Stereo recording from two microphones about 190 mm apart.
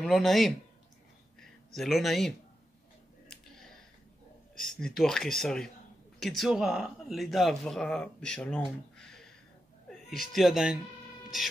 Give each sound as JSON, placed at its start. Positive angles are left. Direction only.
{"t": 0.0, "sound": "speech", "side_deg": 0}
{"t": 1.8, "sound": "speech", "side_deg": 0}
{"t": 3.3, "sound": "a sound", "side_deg": 0}
{"t": 4.6, "sound": "speech", "side_deg": 5}
{"t": 9.8, "sound": "a sound", "side_deg": 0}
{"t": 10.3, "sound": "speech", "side_deg": 0}